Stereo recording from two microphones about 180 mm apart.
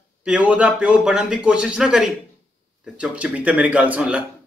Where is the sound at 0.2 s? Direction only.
5° right (ahead or behind).